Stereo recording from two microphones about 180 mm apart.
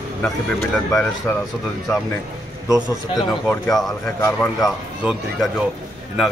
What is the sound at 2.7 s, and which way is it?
Speech, 20° right (ahead or behind).